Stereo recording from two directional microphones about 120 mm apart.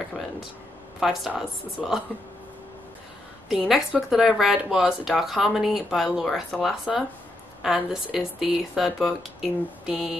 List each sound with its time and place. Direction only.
0.9 s speech: 5° right (ahead or behind)
3.4 s speech: 5° right (ahead or behind)